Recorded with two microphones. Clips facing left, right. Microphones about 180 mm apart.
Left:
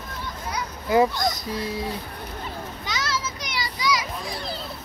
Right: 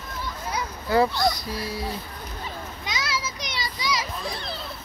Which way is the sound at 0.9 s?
15° left (ahead or behind).